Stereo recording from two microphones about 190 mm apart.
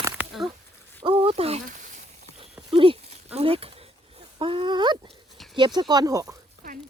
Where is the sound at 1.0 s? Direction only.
25° right (ahead or behind).